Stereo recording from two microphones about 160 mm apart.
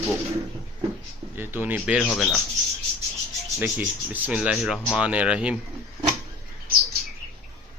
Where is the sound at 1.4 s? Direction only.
10° right (ahead or behind).